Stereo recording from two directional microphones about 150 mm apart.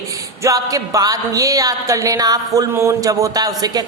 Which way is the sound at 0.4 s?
25° right (ahead or behind).